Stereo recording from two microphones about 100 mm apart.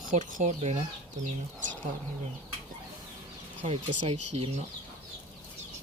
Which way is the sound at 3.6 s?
90° right.